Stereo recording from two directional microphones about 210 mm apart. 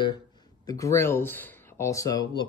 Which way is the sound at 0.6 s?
15° left (ahead or behind).